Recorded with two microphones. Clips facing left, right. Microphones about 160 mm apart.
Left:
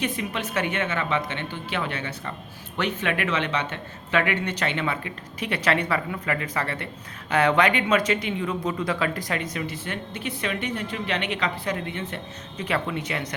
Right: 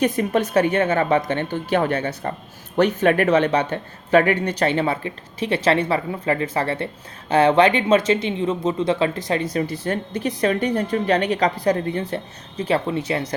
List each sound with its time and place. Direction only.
0.0 s speech: 40° right (ahead or behind)